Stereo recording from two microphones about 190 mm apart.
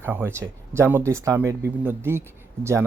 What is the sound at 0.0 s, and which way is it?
Speech, 10° right (ahead or behind).